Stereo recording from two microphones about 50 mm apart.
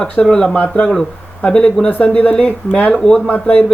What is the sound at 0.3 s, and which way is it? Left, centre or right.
Speech, centre.